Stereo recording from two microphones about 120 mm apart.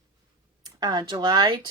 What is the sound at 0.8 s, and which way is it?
Speech, 40° right (ahead or behind).